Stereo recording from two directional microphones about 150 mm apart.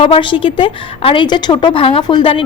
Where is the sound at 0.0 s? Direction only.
35° left (ahead or behind).